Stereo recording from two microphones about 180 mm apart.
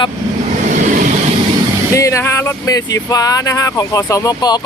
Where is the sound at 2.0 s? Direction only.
15° left (ahead or behind).